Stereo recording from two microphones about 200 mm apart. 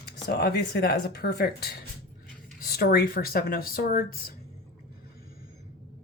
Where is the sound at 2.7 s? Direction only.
50° left (ahead or behind).